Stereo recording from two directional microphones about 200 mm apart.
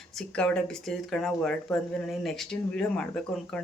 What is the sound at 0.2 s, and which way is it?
Speech, 5° left (ahead or behind).